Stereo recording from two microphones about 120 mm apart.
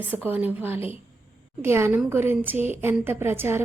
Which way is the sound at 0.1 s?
15° right (ahead or behind).